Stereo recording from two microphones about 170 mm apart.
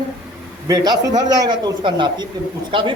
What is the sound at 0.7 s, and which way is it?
Speech, 25° right (ahead or behind).